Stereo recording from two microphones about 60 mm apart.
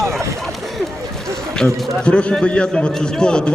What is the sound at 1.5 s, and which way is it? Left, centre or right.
A man's voice, centre.